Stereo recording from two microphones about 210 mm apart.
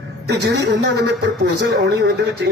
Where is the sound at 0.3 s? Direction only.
50° right (ahead or behind).